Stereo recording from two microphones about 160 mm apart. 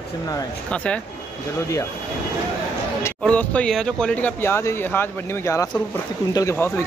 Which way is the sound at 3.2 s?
10° left (ahead or behind).